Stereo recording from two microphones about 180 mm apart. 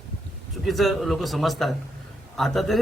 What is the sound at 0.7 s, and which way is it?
Speech, centre (ahead or behind).